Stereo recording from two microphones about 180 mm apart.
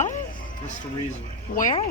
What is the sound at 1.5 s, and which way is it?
Speech, 50° left (ahead or behind).